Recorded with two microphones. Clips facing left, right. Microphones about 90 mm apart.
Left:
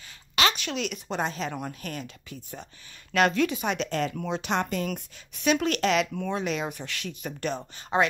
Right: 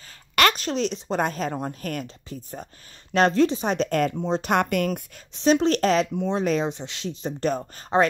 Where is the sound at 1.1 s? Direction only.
45° right (ahead or behind).